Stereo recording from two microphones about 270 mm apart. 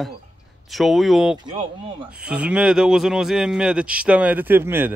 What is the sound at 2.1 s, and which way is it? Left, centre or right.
Speech, centre.